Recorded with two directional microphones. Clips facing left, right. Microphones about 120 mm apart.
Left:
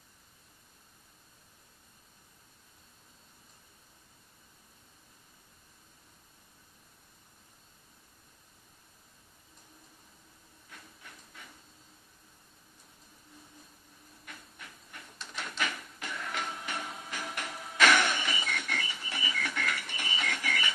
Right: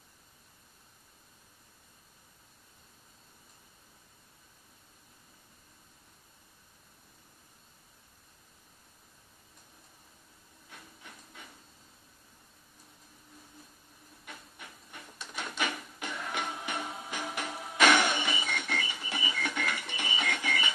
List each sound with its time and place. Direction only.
15.4 s music: 20° right (ahead or behind)